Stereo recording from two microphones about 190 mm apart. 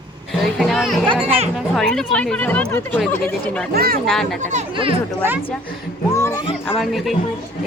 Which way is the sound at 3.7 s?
55° right (ahead or behind).